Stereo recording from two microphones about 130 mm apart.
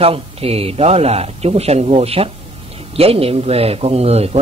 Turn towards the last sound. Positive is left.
turn(degrees=-50)  # may be behind; listen again after turning